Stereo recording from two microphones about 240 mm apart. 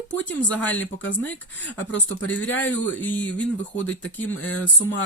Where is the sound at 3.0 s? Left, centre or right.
Centre.